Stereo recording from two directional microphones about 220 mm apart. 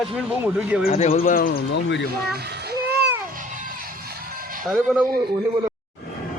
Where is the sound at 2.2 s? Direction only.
45° right (ahead or behind).